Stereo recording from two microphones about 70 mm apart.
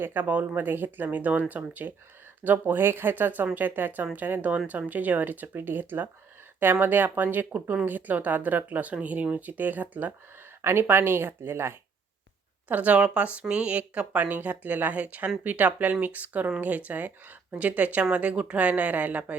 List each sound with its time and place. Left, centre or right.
0.0 s speech: right
10.6 s speech: right
12.6 s speech: right